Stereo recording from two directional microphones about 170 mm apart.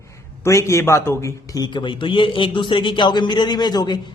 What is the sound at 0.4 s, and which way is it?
A man's voice, 15° left (ahead or behind).